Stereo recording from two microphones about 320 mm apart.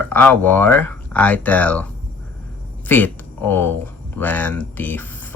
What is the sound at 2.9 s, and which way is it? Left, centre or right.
Speech, centre.